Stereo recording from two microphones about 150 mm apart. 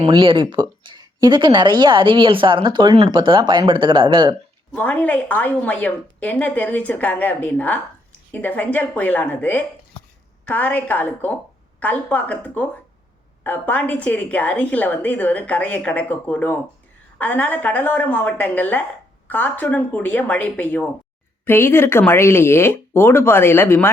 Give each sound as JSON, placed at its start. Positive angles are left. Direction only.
{"t": 0.0, "sound": "speech", "side_deg": -35}
{"t": 4.7, "sound": "a woman's voice", "side_deg": 10}